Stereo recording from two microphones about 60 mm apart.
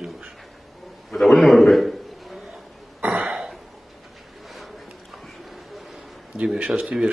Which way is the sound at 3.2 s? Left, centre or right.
Centre.